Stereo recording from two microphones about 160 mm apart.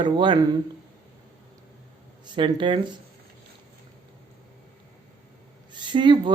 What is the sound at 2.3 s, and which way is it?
Speech, 30° right (ahead or behind).